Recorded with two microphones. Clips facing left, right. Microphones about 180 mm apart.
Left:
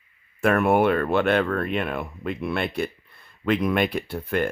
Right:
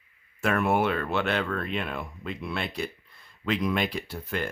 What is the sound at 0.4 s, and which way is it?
Speech, 55° left (ahead or behind).